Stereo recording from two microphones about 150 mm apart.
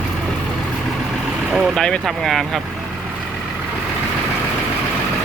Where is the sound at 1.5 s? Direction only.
Centre (ahead or behind).